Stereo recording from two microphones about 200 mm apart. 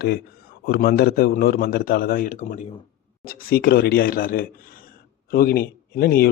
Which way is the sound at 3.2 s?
50° left (ahead or behind).